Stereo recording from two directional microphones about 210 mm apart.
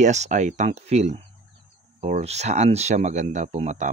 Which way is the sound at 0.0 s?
35° right (ahead or behind).